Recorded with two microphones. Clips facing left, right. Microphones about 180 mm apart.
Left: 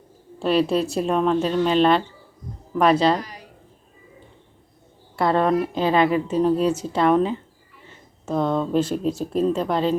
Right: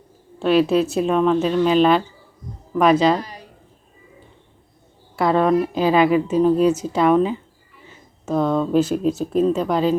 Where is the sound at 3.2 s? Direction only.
30° right (ahead or behind).